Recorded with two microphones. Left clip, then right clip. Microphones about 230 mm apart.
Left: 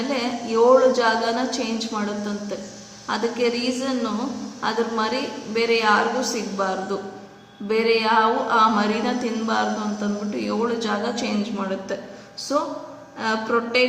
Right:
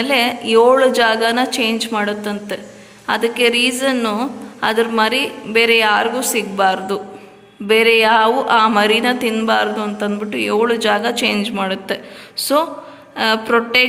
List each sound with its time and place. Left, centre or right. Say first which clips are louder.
0.1 s speech: right 12 dB; right
13.1 s speech: right 7 dB; right